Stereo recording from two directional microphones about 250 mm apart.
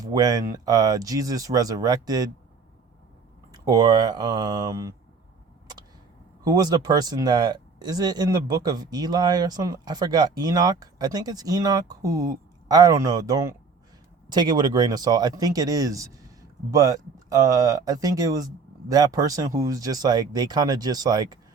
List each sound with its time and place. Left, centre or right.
0.0 s speech: centre
3.5 s speech: centre
6.4 s speech: centre